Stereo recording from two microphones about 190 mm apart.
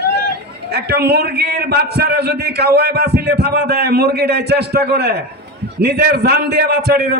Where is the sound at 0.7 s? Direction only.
55° right (ahead or behind).